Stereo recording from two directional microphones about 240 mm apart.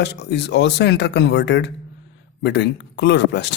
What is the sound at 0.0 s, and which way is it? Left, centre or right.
Speech, left.